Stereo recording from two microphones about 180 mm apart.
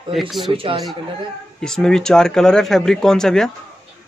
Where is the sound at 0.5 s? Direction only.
30° right (ahead or behind).